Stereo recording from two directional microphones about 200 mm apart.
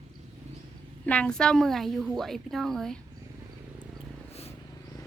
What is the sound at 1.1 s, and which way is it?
A woman's voice, 5° left (ahead or behind).